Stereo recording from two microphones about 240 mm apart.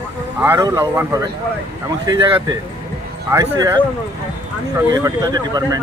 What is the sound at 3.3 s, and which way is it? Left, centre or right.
Speech, centre.